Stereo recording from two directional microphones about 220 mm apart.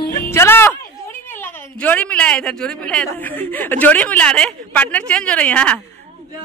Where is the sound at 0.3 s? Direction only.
10° left (ahead or behind).